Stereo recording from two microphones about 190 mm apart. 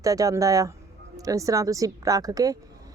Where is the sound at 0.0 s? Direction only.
15° right (ahead or behind).